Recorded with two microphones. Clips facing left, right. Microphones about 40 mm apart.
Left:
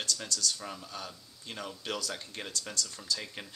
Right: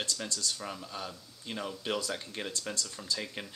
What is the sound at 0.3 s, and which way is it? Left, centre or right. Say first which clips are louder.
Speech: left 2 dB; right.